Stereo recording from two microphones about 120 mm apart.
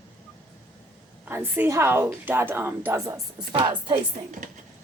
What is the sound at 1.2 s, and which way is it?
A woman's voice, 15° right (ahead or behind).